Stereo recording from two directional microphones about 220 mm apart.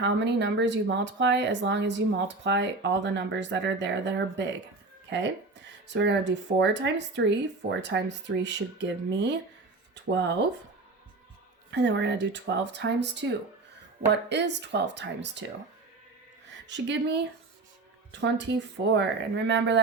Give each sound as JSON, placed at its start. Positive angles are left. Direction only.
{"t": 0.0, "sound": "speech", "side_deg": -55}
{"t": 11.7, "sound": "speech", "side_deg": -50}
{"t": 16.6, "sound": "a woman's voice", "side_deg": -55}
{"t": 18.1, "sound": "speech", "side_deg": -55}